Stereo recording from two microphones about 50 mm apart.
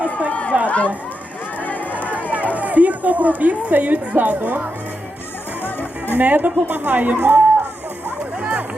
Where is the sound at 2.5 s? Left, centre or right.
Right.